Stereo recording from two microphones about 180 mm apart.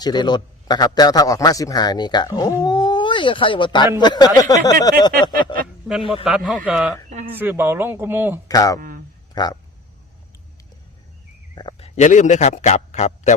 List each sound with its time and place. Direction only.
0.0 s a man's voice: 25° left (ahead or behind)
6.2 s speech: centre (ahead or behind)
7.1 s speech: 40° right (ahead or behind)
7.3 s speech: 10° right (ahead or behind)
8.4 s a man's voice: 20° left (ahead or behind)
11.5 s speech: 25° left (ahead or behind)
11.9 s a man's voice: 45° left (ahead or behind)